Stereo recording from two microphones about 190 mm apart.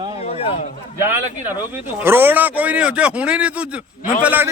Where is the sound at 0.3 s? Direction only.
30° left (ahead or behind).